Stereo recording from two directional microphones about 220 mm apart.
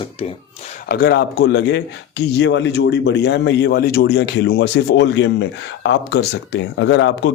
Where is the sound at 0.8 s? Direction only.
45° left (ahead or behind).